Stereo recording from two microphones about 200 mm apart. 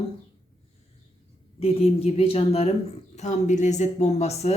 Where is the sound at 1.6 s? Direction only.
30° left (ahead or behind).